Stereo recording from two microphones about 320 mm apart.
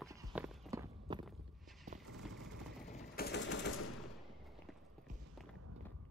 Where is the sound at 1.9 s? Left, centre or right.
Right.